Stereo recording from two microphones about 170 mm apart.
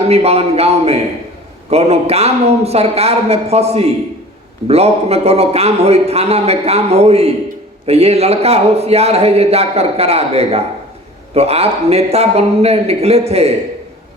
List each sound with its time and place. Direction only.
0.1 s a man's voice: 35° right (ahead or behind)